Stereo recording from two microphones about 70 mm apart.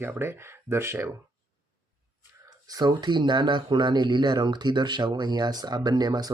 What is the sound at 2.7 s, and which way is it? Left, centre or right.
Speech, right.